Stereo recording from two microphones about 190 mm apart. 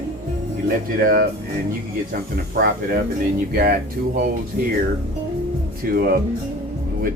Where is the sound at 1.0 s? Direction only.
55° right (ahead or behind).